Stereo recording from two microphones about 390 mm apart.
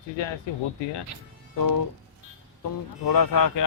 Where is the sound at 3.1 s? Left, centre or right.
Left.